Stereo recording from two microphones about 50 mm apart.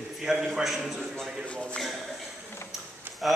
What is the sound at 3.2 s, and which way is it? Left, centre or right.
Speech, centre.